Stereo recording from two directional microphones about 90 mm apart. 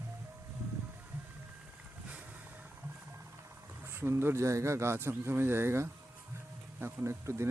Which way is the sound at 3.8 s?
25° right (ahead or behind).